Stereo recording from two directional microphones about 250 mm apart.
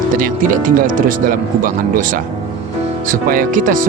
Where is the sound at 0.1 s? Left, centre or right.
Right.